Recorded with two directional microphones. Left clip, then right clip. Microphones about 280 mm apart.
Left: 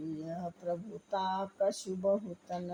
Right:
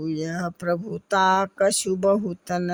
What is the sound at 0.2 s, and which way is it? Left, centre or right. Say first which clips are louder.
A woman's voice: right 11 dB; right.